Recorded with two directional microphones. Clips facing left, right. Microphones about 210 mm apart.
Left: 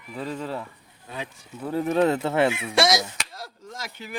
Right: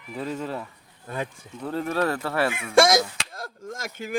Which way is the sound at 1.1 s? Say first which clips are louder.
Right 4 dB; 50° right (ahead or behind).